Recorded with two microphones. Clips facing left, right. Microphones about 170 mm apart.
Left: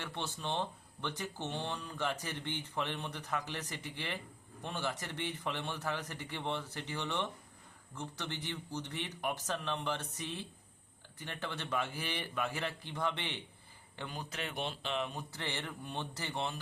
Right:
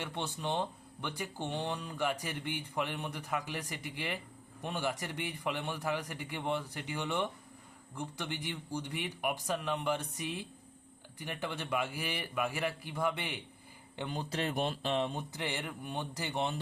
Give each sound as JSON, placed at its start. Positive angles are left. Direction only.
{"t": 0.0, "sound": "speech", "side_deg": -15}
{"t": 13.9, "sound": "speech", "side_deg": -20}
{"t": 15.3, "sound": "speech", "side_deg": -15}